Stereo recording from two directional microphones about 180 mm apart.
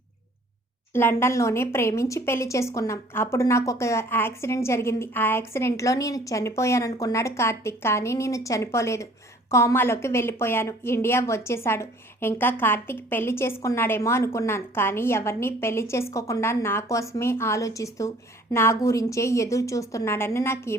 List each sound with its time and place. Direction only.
0.9 s a woman's voice: 15° left (ahead or behind)